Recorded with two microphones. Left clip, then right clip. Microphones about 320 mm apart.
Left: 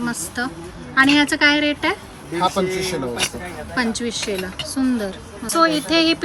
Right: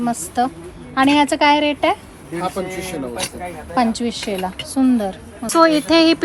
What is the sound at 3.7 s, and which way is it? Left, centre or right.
Speech, centre.